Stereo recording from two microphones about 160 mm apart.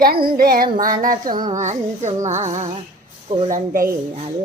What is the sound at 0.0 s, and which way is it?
Female singing, 70° right (ahead or behind).